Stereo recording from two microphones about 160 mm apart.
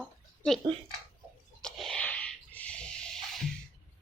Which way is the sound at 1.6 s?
5° left (ahead or behind).